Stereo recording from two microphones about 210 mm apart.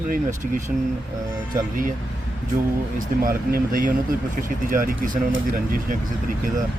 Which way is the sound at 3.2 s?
40° right (ahead or behind).